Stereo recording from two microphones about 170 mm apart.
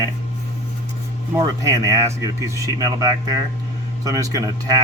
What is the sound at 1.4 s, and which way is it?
Speech, 20° right (ahead or behind).